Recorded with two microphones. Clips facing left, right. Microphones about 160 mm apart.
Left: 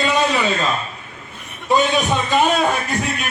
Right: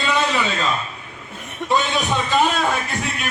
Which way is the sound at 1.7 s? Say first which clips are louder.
Left 4 dB; 15° left (ahead or behind).